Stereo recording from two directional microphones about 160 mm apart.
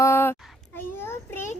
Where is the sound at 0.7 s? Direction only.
15° left (ahead or behind).